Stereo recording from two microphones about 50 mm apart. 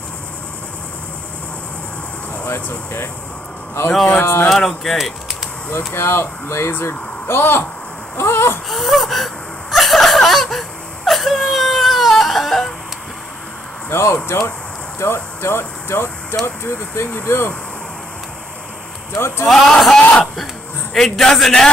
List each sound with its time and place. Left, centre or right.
2.4 s speech: left
4.2 s speech: left
4.5 s speech: centre
5.9 s speech: left
8.2 s wail: left
8.6 s wheeze: centre
11.1 s baby cry: centre
13.8 s speech: left
19.1 s speech: left
19.4 s speech: centre
20.0 s speech: left
20.9 s a man's voice: centre